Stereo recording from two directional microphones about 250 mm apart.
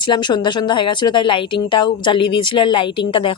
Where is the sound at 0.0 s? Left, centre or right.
Centre.